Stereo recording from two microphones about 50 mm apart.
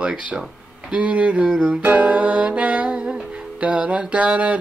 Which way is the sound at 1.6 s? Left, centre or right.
Right.